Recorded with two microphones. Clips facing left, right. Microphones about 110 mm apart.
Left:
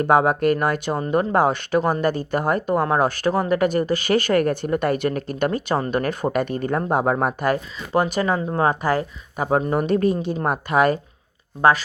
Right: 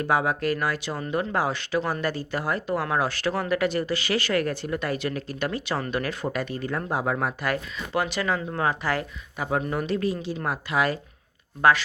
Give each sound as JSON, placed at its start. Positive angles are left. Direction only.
{"t": 0.0, "sound": "speech", "side_deg": 50}
{"t": 9.8, "sound": "speech", "side_deg": 50}
{"t": 11.6, "sound": "speech", "side_deg": 40}